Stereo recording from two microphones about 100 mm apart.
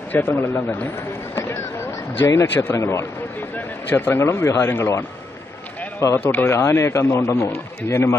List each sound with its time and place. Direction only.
0.1 s speech: 20° left (ahead or behind)
1.3 s a sound: 25° left (ahead or behind)
2.1 s speech: 25° left (ahead or behind)